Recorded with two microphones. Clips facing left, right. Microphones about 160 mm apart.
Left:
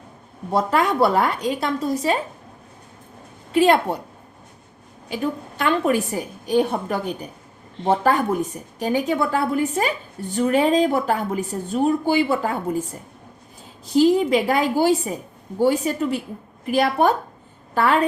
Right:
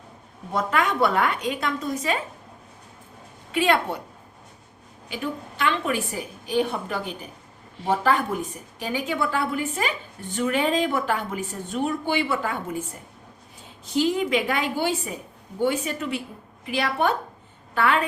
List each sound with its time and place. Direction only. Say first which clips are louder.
0.5 s a woman's voice: left 4 dB; 35° left (ahead or behind)
3.5 s a woman's voice: left 5 dB; 40° left (ahead or behind)
5.0 s a woman's voice: left 5 dB; 40° left (ahead or behind)
13.9 s a woman's voice: left 6 dB; 35° left (ahead or behind)